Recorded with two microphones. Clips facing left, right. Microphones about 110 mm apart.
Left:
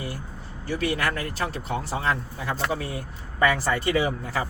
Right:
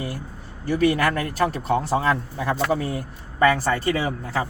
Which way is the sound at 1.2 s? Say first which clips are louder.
Right 6 dB; 50° right (ahead or behind).